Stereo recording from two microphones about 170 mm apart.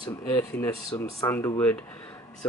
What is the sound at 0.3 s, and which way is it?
A man's voice, 15° left (ahead or behind).